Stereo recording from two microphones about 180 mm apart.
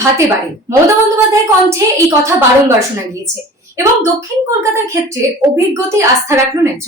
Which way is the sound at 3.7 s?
15° right (ahead or behind).